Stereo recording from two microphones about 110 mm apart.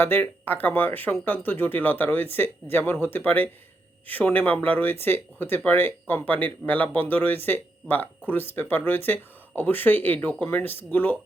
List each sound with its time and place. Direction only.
0.0 s speech: 20° left (ahead or behind)